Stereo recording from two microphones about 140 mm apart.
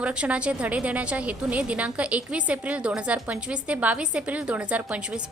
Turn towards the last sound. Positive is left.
turn(degrees=-10)  # may be behind; listen again after turning